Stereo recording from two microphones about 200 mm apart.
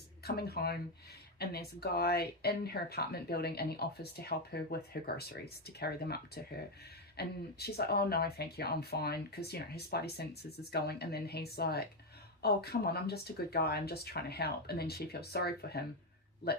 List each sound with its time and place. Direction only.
0.3 s speech: 50° left (ahead or behind)